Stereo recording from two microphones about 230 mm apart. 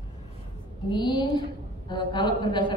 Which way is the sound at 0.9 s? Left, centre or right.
Centre.